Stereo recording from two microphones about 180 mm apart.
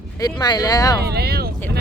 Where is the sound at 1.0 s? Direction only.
60° right (ahead or behind).